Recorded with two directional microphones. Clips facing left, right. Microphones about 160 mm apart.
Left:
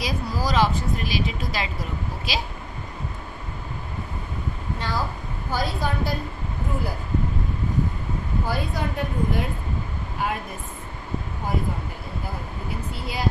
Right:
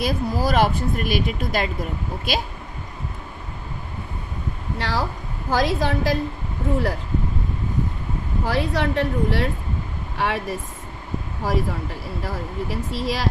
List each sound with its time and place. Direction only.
0.0 s speech: 55° right (ahead or behind)
4.7 s a woman's voice: 85° right
8.5 s a woman's voice: 90° right